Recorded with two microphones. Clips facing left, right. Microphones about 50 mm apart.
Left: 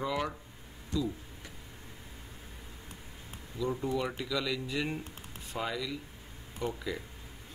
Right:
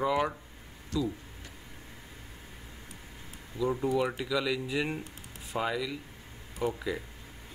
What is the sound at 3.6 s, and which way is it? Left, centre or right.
A man's voice, centre.